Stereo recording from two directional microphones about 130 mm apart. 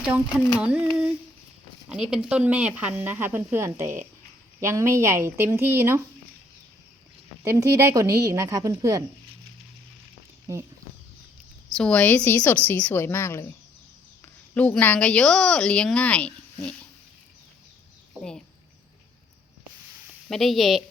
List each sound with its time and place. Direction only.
0.0 s speech: 5° right (ahead or behind)
1.9 s a woman's voice: 5° right (ahead or behind)
7.4 s a woman's voice: 20° right (ahead or behind)
10.4 s speech: 25° right (ahead or behind)
11.8 s speech: 10° left (ahead or behind)
14.5 s speech: 10° left (ahead or behind)
18.2 s a woman's voice: 5° left (ahead or behind)
20.3 s speech: centre (ahead or behind)